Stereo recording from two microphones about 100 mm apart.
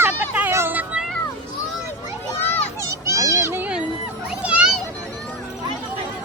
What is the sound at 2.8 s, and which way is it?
Children playing, 30° right (ahead or behind).